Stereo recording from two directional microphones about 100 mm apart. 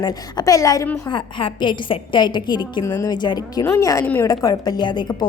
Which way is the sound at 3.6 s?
30° left (ahead or behind).